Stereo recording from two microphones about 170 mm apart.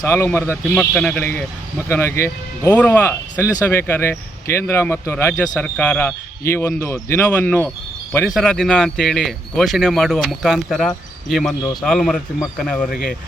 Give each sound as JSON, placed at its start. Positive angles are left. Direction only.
{"t": 0.0, "sound": "speech", "side_deg": 15}
{"t": 8.3, "sound": "speech", "side_deg": 0}